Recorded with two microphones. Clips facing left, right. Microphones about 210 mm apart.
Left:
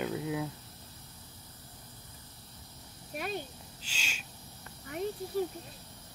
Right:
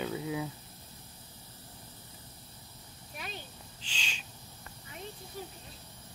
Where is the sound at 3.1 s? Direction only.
50° left (ahead or behind).